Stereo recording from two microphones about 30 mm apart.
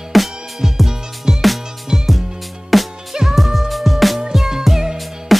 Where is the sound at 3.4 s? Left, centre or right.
Centre.